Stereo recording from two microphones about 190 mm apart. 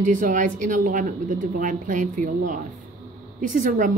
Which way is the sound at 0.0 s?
40° right (ahead or behind).